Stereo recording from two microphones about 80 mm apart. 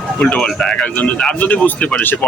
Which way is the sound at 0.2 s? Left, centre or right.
Centre.